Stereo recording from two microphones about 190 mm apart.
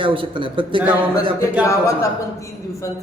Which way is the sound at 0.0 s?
25° right (ahead or behind).